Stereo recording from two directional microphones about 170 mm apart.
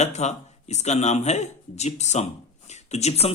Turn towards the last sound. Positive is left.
turn(degrees=40)  # may be behind; listen again after turning